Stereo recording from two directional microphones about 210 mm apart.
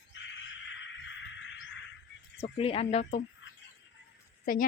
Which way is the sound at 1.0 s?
60° left (ahead or behind).